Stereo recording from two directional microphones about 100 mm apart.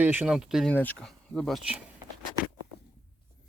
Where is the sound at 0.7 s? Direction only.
20° left (ahead or behind).